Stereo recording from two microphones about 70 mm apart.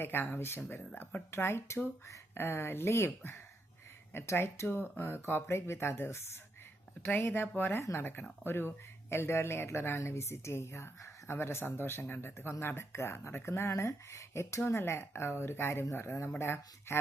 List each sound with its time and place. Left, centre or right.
0.0 s speech: left